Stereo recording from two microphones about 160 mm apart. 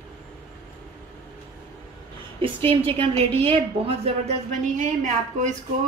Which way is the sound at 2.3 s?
35° right (ahead or behind).